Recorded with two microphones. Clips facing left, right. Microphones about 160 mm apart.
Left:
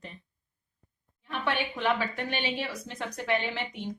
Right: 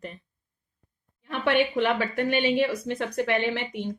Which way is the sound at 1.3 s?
60° right (ahead or behind).